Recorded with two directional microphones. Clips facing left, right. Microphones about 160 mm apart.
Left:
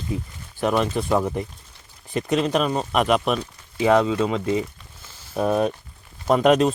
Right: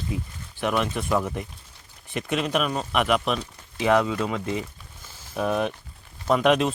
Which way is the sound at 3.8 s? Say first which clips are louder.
Left 3 dB; 30° left (ahead or behind).